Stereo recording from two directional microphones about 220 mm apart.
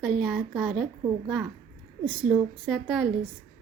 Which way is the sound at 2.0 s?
Centre (ahead or behind).